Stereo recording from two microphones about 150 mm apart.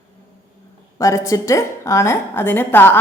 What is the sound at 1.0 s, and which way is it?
A woman's voice, 20° left (ahead or behind).